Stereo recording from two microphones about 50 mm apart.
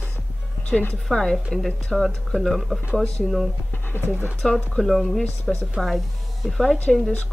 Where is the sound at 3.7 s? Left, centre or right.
Left.